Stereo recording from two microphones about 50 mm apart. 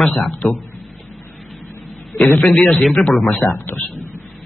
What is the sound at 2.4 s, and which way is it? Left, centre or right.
Speech, centre.